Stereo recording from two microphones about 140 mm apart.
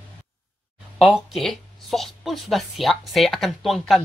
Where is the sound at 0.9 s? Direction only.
Centre (ahead or behind).